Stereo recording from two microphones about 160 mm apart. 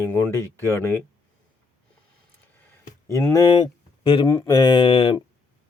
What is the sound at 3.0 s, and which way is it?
Speech, 15° left (ahead or behind).